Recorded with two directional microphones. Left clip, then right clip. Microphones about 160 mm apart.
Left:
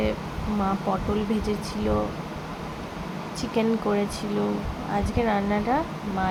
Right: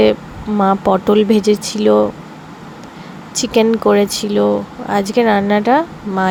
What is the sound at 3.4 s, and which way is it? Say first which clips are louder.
Speech: right 13 dB; 60° right (ahead or behind).